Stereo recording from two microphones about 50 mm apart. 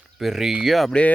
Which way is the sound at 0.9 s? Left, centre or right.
Left.